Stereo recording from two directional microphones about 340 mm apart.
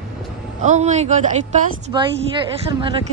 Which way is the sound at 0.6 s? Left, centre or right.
Right.